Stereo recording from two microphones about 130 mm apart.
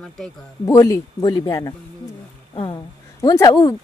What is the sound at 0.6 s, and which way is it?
Speech, 25° left (ahead or behind).